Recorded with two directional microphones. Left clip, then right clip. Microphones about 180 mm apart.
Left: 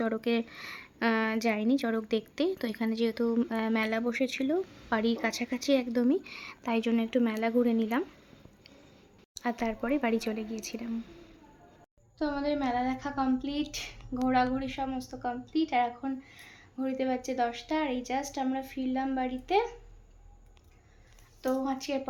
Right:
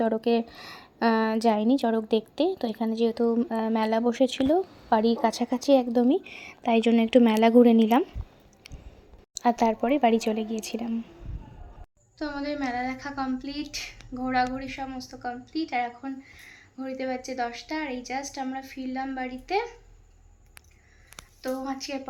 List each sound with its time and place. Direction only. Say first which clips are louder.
0.0 s a woman's voice: right 6 dB; 10° right (ahead or behind)
6.1 s speech: right 4 dB; 20° left (ahead or behind)
6.3 s a woman's voice: right 7 dB; 10° right (ahead or behind); by 8.0 s 30° right (ahead or behind)
9.4 s a woman's voice: right 9 dB; 20° right (ahead or behind)
12.2 s speech: even; centre (ahead or behind)
21.4 s speech: left 1 dB; 10° left (ahead or behind)